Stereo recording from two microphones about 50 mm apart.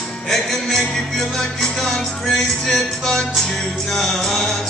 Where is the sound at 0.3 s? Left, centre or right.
Centre.